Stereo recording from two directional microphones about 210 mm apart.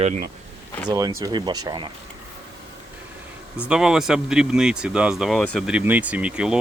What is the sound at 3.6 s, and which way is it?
Speech, 5° right (ahead or behind).